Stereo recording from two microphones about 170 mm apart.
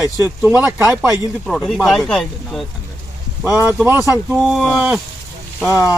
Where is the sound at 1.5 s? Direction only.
Centre (ahead or behind).